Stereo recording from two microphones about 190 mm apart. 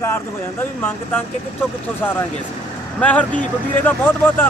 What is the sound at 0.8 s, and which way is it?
Speech, 10° left (ahead or behind).